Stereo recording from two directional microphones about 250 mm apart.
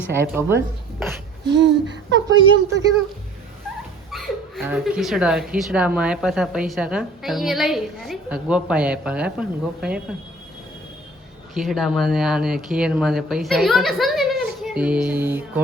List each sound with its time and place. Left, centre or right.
0.1 s speech: centre
1.5 s speech: right
2.2 s a woman's voice: centre
4.1 s speech: centre
11.5 s speech: centre